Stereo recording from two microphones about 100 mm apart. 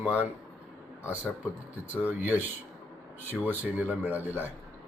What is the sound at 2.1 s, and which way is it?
Speech, 15° right (ahead or behind).